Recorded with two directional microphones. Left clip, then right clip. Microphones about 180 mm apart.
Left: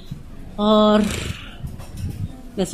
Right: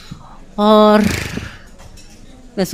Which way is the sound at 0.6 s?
45° right (ahead or behind).